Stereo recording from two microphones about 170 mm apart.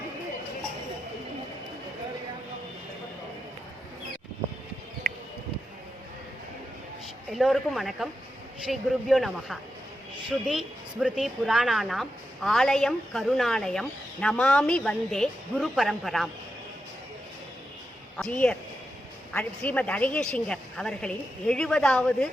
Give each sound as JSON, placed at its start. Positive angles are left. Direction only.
{"t": 5.0, "sound": "a sound", "side_deg": -65}
{"t": 7.3, "sound": "a woman's voice", "side_deg": 0}
{"t": 18.2, "sound": "a woman's voice", "side_deg": 5}